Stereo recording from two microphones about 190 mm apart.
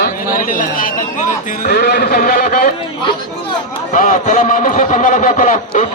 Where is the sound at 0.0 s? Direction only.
50° left (ahead or behind).